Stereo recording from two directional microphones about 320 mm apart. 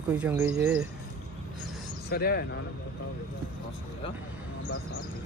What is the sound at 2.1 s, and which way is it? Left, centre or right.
Speech, left.